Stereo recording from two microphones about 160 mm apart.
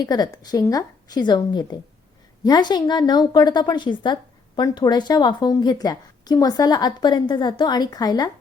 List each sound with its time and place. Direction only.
0.0 s a woman's voice: 25° left (ahead or behind)